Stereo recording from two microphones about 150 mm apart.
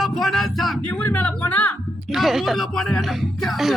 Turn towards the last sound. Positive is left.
turn(degrees=0)  # may be behind; listen again after turning